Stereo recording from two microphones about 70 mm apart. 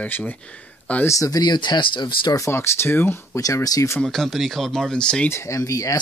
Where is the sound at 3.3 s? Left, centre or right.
Left.